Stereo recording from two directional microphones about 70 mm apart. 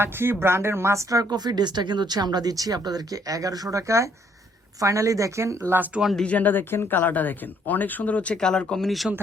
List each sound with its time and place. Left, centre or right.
0.0 s speech: right
1.1 s a woman's voice: right
5.7 s speech: right
6.2 s speech: left
8.4 s speech: centre